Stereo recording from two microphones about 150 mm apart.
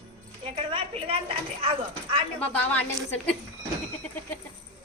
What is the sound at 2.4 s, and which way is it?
Speech, 10° left (ahead or behind).